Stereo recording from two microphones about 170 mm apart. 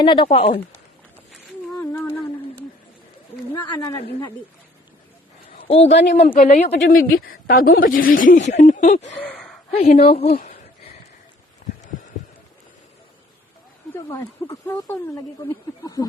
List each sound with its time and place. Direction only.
0.0 s a woman's voice: 30° left (ahead or behind)
1.8 s humming: 15° left (ahead or behind)
3.5 s speech: 20° left (ahead or behind)
5.6 s a man's voice: 35° left (ahead or behind)
5.9 s speech: 85° left
6.3 s a woman's voice: 50° left (ahead or behind)
8.4 s speech: 45° left (ahead or behind)
9.2 s a sound: 5° left (ahead or behind)
9.7 s a woman's voice: 40° left (ahead or behind)
13.9 s speech: 15° left (ahead or behind)